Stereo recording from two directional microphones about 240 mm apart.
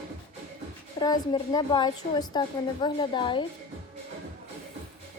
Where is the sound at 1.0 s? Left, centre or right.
Centre.